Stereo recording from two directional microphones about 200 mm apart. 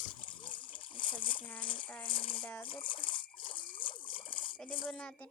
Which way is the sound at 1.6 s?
25° left (ahead or behind).